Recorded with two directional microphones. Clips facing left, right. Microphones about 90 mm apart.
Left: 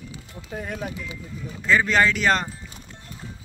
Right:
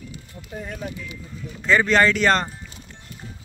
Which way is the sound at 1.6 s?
5° left (ahead or behind).